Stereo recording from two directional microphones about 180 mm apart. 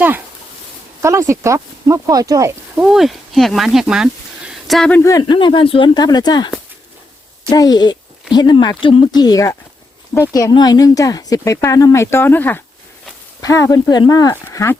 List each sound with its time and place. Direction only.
1.0 s speech: 15° right (ahead or behind)
2.8 s speech: centre (ahead or behind); by 6.5 s 25° left (ahead or behind)
7.5 s speech: 20° left (ahead or behind)